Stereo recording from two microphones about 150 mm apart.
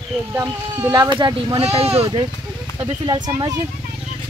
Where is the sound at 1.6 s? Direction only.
45° right (ahead or behind).